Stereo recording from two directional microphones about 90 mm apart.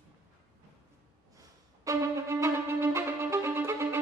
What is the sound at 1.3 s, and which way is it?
Music, 40° right (ahead or behind).